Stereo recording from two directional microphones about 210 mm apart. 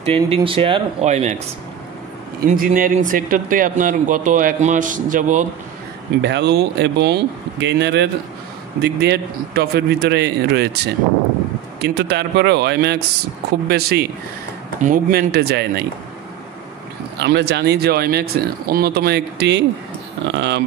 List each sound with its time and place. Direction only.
0.0 s speech: 25° right (ahead or behind)
2.5 s speech: 40° right (ahead or behind)
6.2 s speech: 55° right (ahead or behind)
11.8 s speech: 50° right (ahead or behind)
17.2 s speech: 55° right (ahead or behind)